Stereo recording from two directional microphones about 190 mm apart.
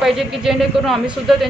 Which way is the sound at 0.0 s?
Centre (ahead or behind).